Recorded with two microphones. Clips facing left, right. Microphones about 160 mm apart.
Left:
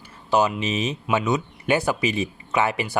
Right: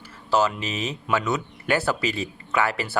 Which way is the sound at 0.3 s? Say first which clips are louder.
Left 2 dB; 15° left (ahead or behind).